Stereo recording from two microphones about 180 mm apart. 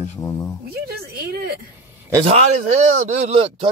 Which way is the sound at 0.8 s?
60° right (ahead or behind).